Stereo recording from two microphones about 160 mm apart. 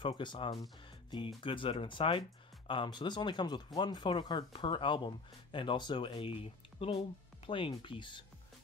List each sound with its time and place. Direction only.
0.0 s speech: 30° left (ahead or behind)